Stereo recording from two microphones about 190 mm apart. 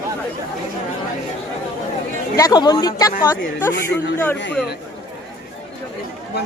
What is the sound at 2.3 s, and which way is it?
Speech, 20° left (ahead or behind).